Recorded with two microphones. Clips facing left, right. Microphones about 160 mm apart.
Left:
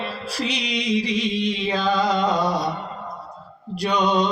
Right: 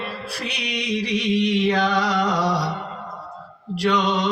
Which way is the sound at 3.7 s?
90° right.